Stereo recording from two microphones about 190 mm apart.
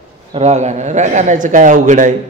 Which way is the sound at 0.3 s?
35° right (ahead or behind).